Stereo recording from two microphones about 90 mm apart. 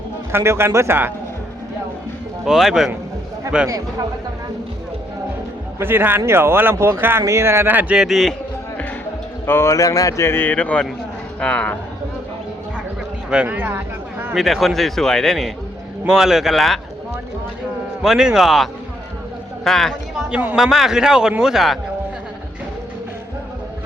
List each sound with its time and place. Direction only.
0.3 s speech: 30° right (ahead or behind)
2.4 s a man's voice: 5° right (ahead or behind)
5.8 s speech: 25° right (ahead or behind)
7.9 s speech: 5° right (ahead or behind)
9.5 s speech: 30° left (ahead or behind); by 11.8 s 10° left (ahead or behind)
13.3 s speech: 15° right (ahead or behind)
14.3 s speech: centre (ahead or behind)
18.0 s speech: 5° right (ahead or behind)